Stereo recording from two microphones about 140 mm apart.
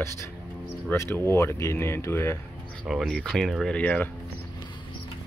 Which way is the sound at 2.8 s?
Centre (ahead or behind).